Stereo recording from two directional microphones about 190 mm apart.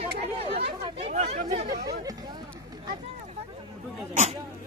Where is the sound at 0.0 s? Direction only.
30° right (ahead or behind).